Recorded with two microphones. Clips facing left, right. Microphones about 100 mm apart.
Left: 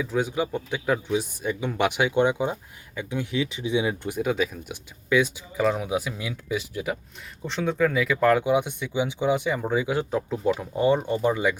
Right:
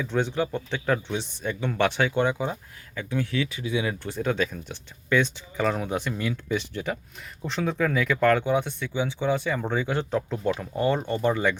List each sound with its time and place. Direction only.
0.0 s speech: 5° left (ahead or behind)